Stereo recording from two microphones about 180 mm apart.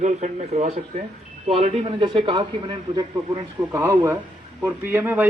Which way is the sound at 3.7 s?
15° right (ahead or behind).